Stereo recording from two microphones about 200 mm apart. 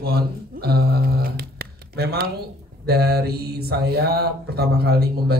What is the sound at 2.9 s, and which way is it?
Speech, 50° right (ahead or behind).